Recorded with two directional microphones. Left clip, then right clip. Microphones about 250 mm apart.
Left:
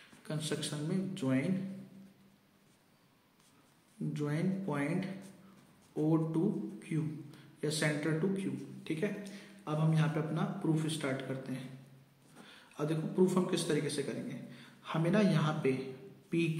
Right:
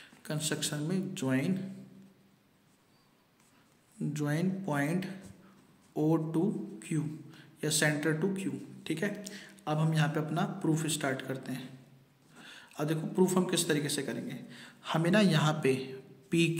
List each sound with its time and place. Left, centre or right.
0.2 s speech: right
4.1 s a man's voice: right